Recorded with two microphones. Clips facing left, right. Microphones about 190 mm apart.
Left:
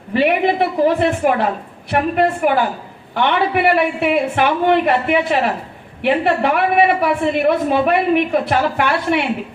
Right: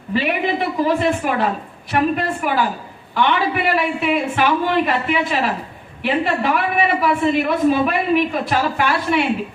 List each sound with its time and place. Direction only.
0.1 s a woman's voice: 60° left (ahead or behind)